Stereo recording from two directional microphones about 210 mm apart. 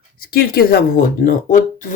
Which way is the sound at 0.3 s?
45° left (ahead or behind).